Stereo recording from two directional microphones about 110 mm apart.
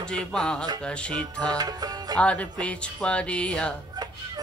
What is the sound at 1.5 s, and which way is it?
Music, 35° right (ahead or behind).